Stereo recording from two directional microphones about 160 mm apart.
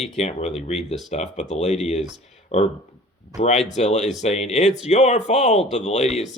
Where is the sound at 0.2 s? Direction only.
45° left (ahead or behind).